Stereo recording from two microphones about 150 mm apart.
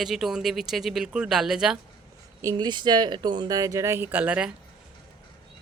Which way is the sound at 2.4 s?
25° right (ahead or behind).